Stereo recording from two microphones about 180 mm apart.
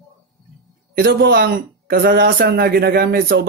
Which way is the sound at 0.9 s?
55° right (ahead or behind).